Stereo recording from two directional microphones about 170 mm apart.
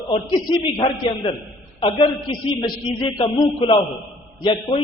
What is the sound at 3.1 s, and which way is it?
A man's voice, 30° left (ahead or behind).